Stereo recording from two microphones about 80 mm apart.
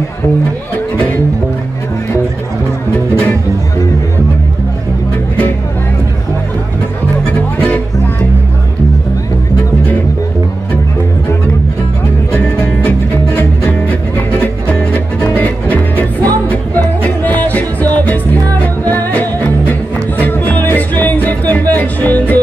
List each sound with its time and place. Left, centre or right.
7.5 s music: centre
12.3 s music: centre